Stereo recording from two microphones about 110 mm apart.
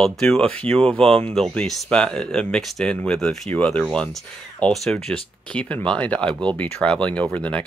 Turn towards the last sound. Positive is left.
turn(degrees=10)  # may be behind; listen again after turning